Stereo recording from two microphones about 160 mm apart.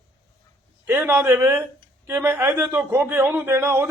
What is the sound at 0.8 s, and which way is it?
A man's voice, 15° right (ahead or behind).